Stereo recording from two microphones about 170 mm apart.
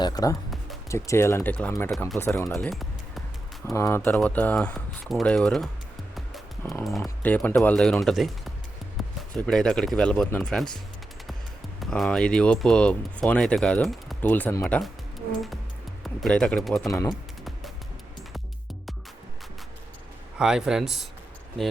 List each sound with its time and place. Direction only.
0.0 s speech: 20° left (ahead or behind)
2.6 s music: centre (ahead or behind)
3.7 s speech: 15° left (ahead or behind)
6.8 s speech: centre (ahead or behind)
11.8 s speech: centre (ahead or behind)
16.0 s speech: 5° left (ahead or behind)
17.1 s music: centre (ahead or behind)
20.4 s speech: 5° right (ahead or behind)